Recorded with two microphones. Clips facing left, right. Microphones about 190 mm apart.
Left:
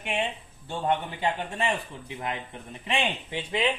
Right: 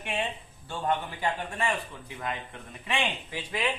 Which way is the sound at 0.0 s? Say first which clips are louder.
Left 2 dB; 20° left (ahead or behind).